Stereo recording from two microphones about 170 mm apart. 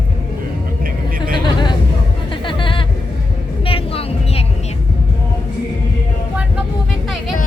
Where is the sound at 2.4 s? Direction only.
30° left (ahead or behind).